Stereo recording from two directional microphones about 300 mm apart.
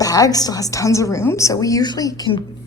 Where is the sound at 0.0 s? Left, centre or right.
Centre.